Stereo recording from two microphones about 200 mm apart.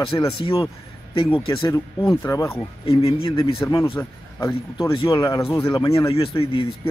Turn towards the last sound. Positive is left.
turn(degrees=30)  # may be behind; listen again after turning